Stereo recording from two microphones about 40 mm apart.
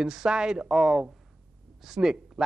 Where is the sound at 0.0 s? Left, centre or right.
Centre.